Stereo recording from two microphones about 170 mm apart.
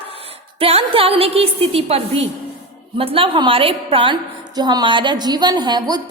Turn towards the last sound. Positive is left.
turn(degrees=-25)  # may be behind; listen again after turning